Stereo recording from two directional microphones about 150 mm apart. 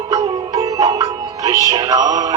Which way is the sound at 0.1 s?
25° right (ahead or behind).